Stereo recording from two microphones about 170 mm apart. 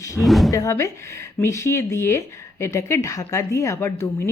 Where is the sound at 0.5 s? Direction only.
20° left (ahead or behind).